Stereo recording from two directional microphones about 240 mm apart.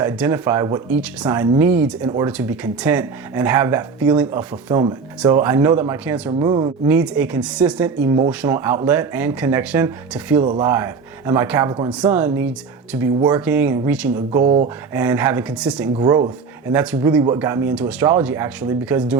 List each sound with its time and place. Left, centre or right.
0.0 s speech: centre
14.4 s speech: right
14.9 s speech: centre
16.0 s speech: centre